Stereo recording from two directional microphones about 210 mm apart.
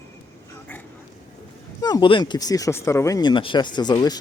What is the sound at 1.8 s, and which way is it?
A man's voice, 20° left (ahead or behind).